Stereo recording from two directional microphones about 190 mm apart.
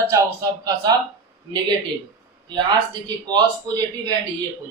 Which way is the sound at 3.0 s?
20° right (ahead or behind).